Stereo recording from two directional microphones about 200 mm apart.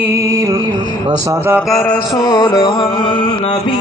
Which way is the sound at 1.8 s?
10° left (ahead or behind).